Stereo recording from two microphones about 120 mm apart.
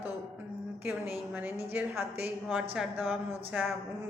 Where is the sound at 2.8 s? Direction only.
5° right (ahead or behind).